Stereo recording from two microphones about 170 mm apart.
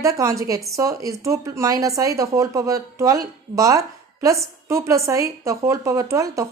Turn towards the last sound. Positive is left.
turn(degrees=-20)  # may be behind; listen again after turning